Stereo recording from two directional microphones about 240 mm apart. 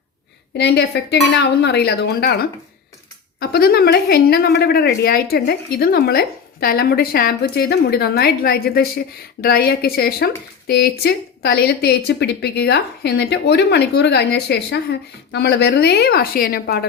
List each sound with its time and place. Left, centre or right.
0.5 s a woman's voice: left
3.5 s a woman's voice: left